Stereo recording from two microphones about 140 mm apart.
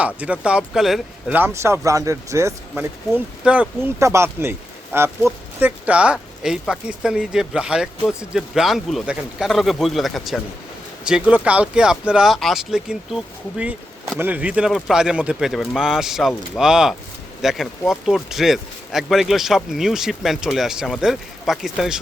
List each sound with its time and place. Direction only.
0.0 s speech: 10° right (ahead or behind)
1.4 s speech: 15° right (ahead or behind)
3.2 s speech: 10° right (ahead or behind)
11.0 s speech: 10° right (ahead or behind)